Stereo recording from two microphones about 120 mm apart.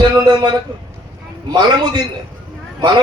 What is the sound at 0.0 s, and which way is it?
A man's voice, 40° right (ahead or behind).